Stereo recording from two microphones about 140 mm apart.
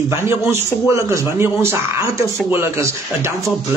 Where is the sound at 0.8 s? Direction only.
20° right (ahead or behind).